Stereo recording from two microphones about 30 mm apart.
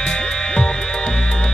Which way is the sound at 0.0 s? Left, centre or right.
Left.